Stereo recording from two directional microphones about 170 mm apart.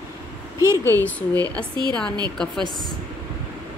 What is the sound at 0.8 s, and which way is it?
Speech, 10° left (ahead or behind).